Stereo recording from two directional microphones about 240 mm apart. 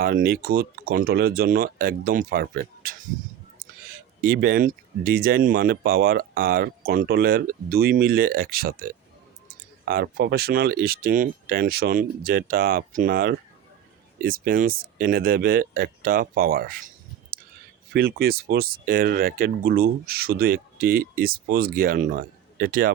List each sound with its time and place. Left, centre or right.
0.0 s speech: right
4.2 s speech: right
17.9 s speech: right